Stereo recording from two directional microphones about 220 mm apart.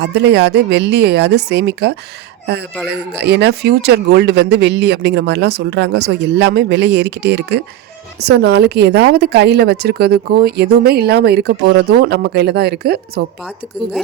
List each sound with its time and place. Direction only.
0.0 s speech: 50° right (ahead or behind)